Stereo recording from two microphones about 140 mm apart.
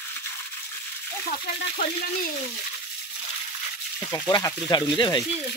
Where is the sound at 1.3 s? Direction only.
80° left.